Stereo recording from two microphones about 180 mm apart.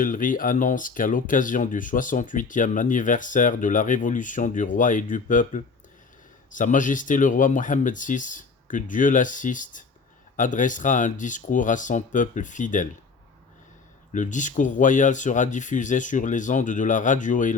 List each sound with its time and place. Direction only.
0.0 s speech: 50° left (ahead or behind)
14.1 s speech: 45° left (ahead or behind)